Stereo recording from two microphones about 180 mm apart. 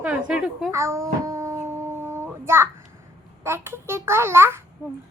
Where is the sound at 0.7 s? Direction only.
15° right (ahead or behind).